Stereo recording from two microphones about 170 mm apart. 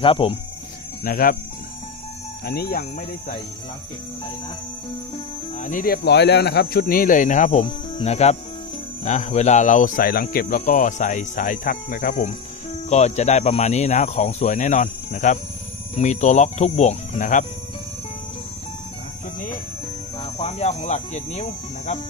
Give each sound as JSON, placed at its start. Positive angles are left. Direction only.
{"t": 0.0, "sound": "speech", "side_deg": 30}
{"t": 1.0, "sound": "speech", "side_deg": 60}
{"t": 2.4, "sound": "speech", "side_deg": 65}
{"t": 5.6, "sound": "speech", "side_deg": 50}
{"t": 6.0, "sound": "speech", "side_deg": 75}
{"t": 20.2, "sound": "speech", "side_deg": 40}